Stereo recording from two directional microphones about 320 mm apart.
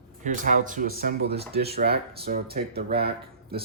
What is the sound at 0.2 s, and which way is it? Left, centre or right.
Speech, right.